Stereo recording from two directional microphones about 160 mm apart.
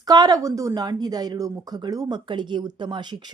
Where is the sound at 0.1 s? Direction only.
25° right (ahead or behind).